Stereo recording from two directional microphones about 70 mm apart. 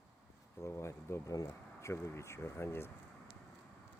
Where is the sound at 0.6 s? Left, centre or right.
Left.